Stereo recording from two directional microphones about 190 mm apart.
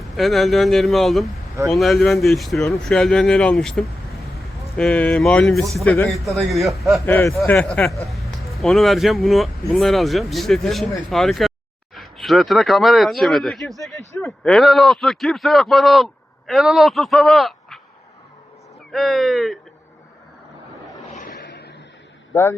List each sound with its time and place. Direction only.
0.0 s speech: centre (ahead or behind)
7.0 s speech: 15° left (ahead or behind)
18.9 s speech: centre (ahead or behind)
21.1 s a sound: 40° left (ahead or behind)
22.3 s speech: 15° left (ahead or behind)